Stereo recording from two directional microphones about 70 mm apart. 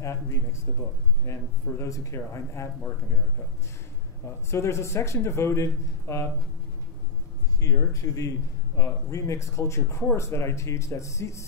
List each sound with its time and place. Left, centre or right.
0.0 s a man's voice: left
4.5 s a man's voice: left
7.6 s a man's voice: left